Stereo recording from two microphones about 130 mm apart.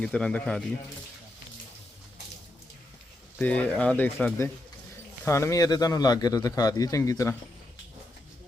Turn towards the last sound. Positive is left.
turn(degrees=25)  # may be behind; listen again after turning